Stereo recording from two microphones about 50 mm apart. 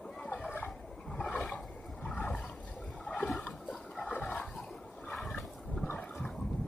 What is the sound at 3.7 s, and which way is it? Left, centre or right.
Toilet flush, centre.